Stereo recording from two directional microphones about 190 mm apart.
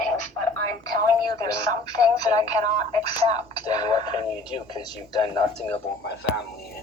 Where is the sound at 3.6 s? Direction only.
20° left (ahead or behind).